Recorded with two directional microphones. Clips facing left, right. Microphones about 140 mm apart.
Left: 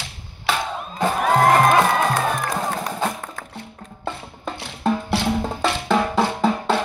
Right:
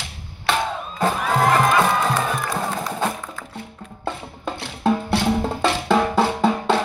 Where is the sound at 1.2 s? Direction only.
50° left (ahead or behind).